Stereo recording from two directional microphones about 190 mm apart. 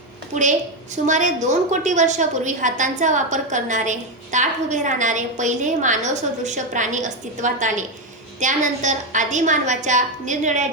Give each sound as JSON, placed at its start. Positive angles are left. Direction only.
{"t": 1.0, "sound": "a woman's voice", "side_deg": -40}